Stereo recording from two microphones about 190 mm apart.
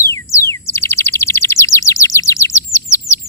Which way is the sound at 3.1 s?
20° right (ahead or behind).